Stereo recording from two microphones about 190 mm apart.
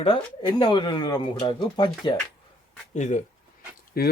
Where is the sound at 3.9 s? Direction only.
55° left (ahead or behind).